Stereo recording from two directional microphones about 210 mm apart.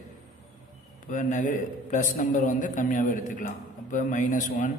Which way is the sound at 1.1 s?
35° left (ahead or behind).